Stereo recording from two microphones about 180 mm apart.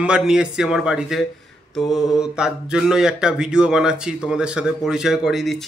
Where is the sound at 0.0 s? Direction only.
5° right (ahead or behind).